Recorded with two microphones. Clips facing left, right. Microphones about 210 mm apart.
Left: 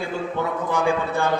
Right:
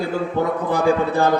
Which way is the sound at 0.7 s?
35° right (ahead or behind).